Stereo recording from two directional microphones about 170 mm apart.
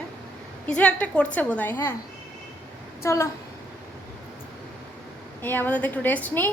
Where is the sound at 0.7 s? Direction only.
5° left (ahead or behind).